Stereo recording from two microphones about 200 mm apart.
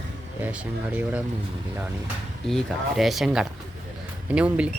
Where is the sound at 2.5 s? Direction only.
Centre (ahead or behind).